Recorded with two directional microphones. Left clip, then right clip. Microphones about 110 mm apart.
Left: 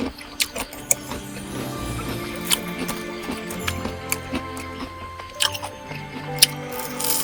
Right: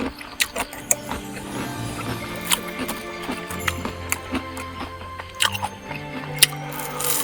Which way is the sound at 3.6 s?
30° right (ahead or behind).